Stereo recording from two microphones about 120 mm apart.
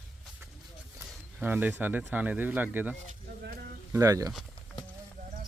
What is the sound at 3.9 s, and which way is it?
Speech, 25° right (ahead or behind).